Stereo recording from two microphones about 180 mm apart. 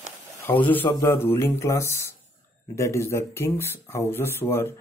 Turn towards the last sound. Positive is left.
turn(degrees=15)  # may be behind; listen again after turning